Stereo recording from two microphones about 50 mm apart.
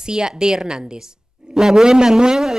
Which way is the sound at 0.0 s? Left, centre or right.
Centre.